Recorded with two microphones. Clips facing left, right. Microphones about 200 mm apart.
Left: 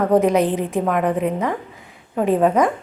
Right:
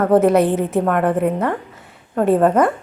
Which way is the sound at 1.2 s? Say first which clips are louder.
Right 2 dB; 5° right (ahead or behind).